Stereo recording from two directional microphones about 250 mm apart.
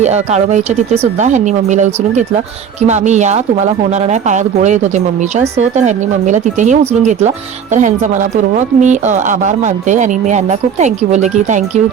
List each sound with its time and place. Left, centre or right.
0.0 s speech: right